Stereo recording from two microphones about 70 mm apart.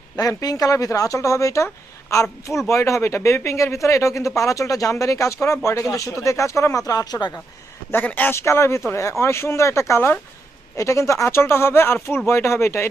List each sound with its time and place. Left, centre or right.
0.2 s speech: left
6.8 s speech: left
7.9 s a man's voice: left
8.4 s speech: left